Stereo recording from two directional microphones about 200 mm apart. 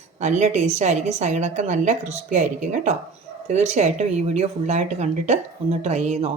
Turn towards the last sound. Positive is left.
turn(degrees=-35)  # may be behind; listen again after turning